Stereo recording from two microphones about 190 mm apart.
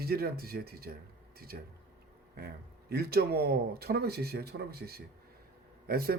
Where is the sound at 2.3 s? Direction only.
55° right (ahead or behind).